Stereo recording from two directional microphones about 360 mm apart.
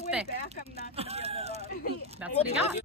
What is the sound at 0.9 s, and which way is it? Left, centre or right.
Speech, centre.